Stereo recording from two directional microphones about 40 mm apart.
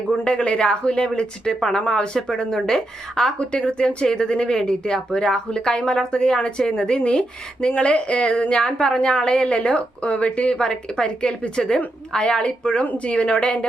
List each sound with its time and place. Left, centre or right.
0.3 s a woman's voice: left
3.6 s a woman's voice: left
12.4 s speech: left